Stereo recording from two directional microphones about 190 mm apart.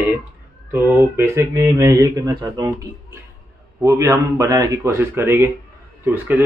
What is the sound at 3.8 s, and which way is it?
Speech, 15° right (ahead or behind).